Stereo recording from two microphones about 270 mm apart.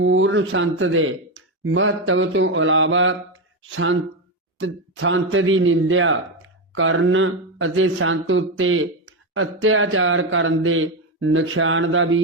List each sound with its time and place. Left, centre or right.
0.0 s a man's voice: right
4.5 s a man's voice: right